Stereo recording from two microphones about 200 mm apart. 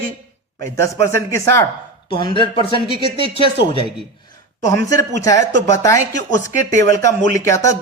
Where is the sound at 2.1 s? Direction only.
25° left (ahead or behind).